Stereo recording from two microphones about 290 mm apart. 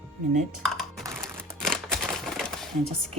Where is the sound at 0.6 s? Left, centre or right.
Centre.